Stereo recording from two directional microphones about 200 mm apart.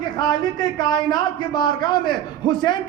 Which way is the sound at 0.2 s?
20° left (ahead or behind).